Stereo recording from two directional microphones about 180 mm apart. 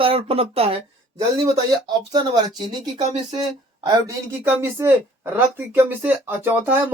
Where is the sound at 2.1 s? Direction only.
20° right (ahead or behind).